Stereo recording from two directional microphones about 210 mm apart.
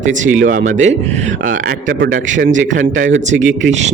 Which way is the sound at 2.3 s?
35° right (ahead or behind).